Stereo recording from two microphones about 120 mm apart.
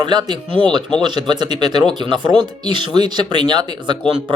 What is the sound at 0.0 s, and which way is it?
Speech, 40° right (ahead or behind).